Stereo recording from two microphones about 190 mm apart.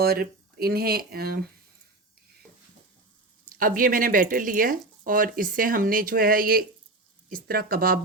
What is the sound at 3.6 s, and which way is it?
Speech, 45° right (ahead or behind).